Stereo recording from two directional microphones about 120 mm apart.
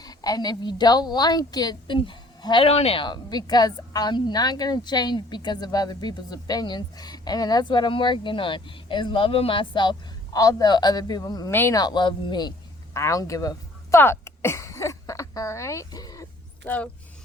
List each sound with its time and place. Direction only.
0.0 s a woman's voice: 30° left (ahead or behind)
2.6 s a woman's voice: 55° left (ahead or behind)
10.3 s a woman's voice: 30° left (ahead or behind)
12.9 s speech: 25° left (ahead or behind)
14.0 s a sound: 20° left (ahead or behind)
16.6 s speech: 10° left (ahead or behind)